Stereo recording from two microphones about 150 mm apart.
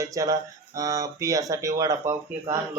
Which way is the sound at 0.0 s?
20° right (ahead or behind).